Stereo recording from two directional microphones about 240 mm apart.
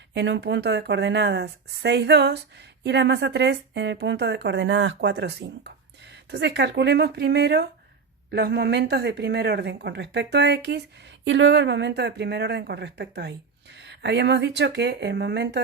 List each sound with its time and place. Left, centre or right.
0.1 s a woman's voice: right